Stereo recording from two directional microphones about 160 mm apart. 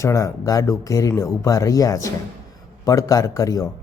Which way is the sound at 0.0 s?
20° left (ahead or behind).